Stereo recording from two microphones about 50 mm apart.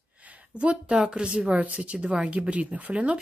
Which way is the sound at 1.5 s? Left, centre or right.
Right.